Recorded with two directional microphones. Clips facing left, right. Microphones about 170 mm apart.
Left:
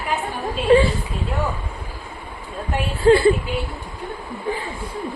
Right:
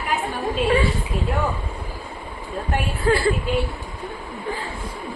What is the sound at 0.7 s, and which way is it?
Speech, 30° left (ahead or behind).